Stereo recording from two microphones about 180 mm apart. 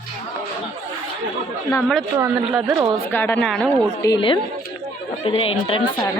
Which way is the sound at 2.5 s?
5° right (ahead or behind).